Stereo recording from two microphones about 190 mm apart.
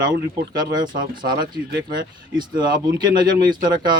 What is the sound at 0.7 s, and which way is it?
A man's voice, 25° right (ahead or behind).